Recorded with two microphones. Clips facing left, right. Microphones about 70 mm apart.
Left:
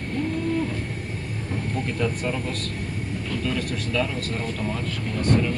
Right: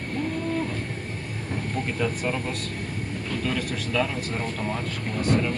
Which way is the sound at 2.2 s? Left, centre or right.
Right.